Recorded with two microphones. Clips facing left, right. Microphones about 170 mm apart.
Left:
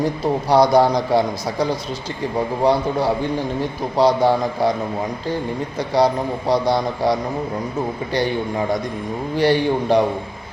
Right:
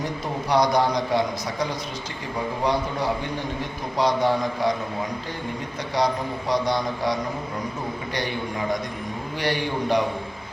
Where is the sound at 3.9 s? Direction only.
30° left (ahead or behind).